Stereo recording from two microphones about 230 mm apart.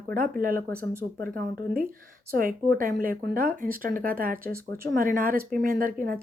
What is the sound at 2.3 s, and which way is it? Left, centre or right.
Speech, right.